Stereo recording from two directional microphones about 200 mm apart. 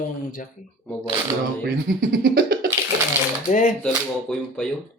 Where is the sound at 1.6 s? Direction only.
50° right (ahead or behind).